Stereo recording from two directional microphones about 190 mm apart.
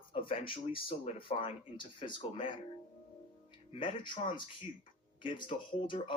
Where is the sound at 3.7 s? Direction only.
25° left (ahead or behind).